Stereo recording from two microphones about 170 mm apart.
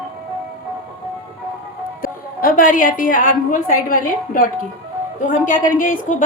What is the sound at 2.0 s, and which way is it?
A woman's voice, 55° left (ahead or behind).